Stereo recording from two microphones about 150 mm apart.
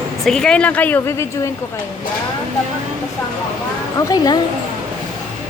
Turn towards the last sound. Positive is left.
turn(degrees=25)  # may be behind; listen again after turning